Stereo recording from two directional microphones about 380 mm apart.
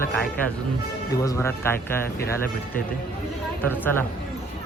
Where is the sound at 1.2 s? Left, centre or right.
Centre.